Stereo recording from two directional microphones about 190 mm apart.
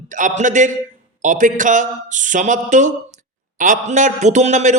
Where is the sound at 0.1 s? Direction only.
40° right (ahead or behind).